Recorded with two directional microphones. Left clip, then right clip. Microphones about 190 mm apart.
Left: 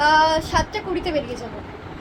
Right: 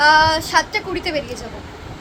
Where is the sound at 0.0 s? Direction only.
5° right (ahead or behind).